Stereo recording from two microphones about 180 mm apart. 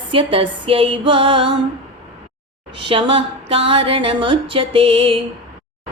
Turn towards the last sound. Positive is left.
turn(degrees=-30)  # may be behind; listen again after turning